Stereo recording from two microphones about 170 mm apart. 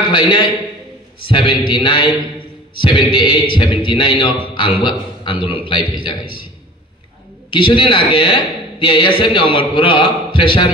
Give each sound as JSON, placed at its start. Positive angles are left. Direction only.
{"t": 0.1, "sound": "a man's voice", "side_deg": 30}
{"t": 7.5, "sound": "a man's voice", "side_deg": 30}